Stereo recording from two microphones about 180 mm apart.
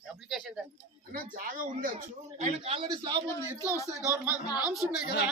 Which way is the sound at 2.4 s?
30° right (ahead or behind).